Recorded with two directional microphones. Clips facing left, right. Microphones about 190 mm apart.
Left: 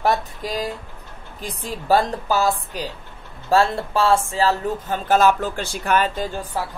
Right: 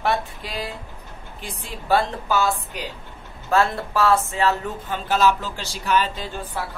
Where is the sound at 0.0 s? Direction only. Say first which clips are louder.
Left 3 dB; 40° left (ahead or behind).